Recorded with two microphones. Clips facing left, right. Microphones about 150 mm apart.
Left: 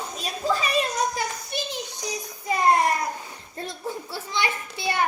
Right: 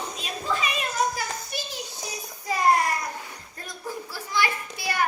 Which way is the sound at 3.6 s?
25° left (ahead or behind).